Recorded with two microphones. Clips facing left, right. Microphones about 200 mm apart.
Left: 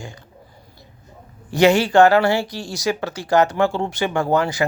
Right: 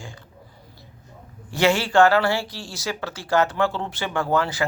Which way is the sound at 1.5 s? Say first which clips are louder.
Left 6 dB; 15° left (ahead or behind).